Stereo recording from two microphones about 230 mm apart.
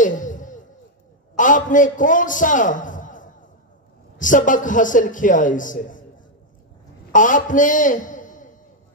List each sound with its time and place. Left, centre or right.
0.0 s a sound: left
1.3 s a man's voice: left
7.1 s a man's voice: left